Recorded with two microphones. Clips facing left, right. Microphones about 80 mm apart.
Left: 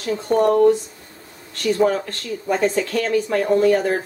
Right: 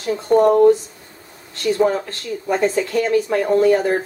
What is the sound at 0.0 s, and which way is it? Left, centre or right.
Speech, centre.